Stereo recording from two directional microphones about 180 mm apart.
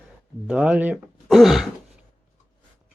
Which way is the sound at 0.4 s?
5° right (ahead or behind).